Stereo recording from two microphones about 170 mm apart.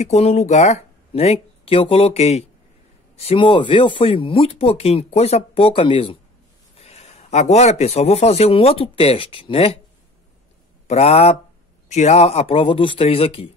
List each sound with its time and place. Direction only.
0.0 s speech: 40° left (ahead or behind)
10.9 s speech: 40° left (ahead or behind)